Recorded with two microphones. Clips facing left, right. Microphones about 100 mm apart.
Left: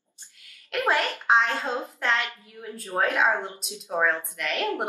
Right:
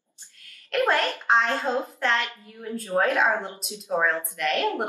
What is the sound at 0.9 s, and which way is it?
A woman's voice, 5° left (ahead or behind).